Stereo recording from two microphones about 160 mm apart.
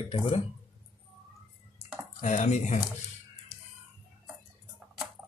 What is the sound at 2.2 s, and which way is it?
Speech, 50° left (ahead or behind).